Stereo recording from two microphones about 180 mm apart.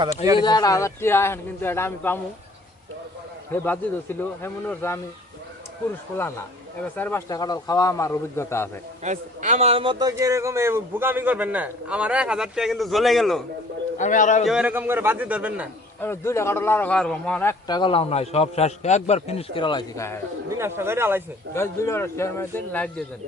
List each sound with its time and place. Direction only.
0.3 s a man's voice: 25° left (ahead or behind)
3.5 s a man's voice: 10° left (ahead or behind)
6.1 s a man's voice: 15° left (ahead or behind)
9.0 s a man's voice: 40° right (ahead or behind); by 13.4 s centre (ahead or behind)
14.0 s a man's voice: 45° left (ahead or behind)
14.4 s a man's voice: 5° right (ahead or behind)
16.0 s a man's voice: 15° left (ahead or behind)
20.5 s a man's voice: 15° right (ahead or behind)
21.5 s a man's voice: 15° left (ahead or behind)